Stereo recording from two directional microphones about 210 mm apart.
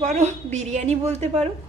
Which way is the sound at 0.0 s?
35° right (ahead or behind).